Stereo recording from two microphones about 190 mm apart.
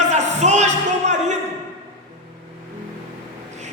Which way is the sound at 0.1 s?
35° right (ahead or behind).